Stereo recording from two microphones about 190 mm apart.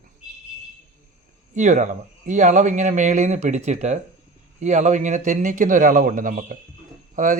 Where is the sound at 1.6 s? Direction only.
40° right (ahead or behind).